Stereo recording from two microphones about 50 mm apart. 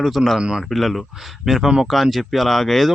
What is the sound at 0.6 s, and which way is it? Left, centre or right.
Speech, centre.